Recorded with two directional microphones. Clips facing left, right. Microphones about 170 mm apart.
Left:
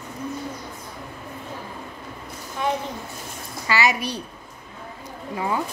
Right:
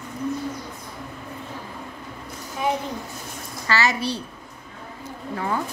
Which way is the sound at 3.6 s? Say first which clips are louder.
Even; 15° left (ahead or behind).